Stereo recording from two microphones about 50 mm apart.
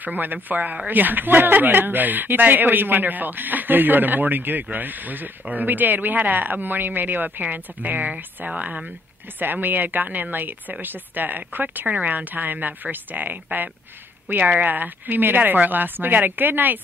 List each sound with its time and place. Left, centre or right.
0.0 s a woman's voice: right
9.4 s speech: right